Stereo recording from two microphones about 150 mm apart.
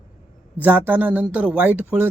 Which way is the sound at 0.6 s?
10° right (ahead or behind).